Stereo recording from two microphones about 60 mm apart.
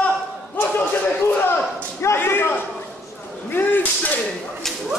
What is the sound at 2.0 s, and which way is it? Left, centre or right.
Speech, left.